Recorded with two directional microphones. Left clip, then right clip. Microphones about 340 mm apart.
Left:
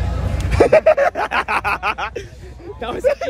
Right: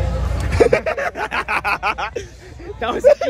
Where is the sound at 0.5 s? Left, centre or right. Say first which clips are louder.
Left 4 dB; centre.